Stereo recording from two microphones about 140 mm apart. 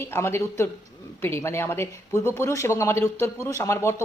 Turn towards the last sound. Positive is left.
turn(degrees=20)  # may be behind; listen again after turning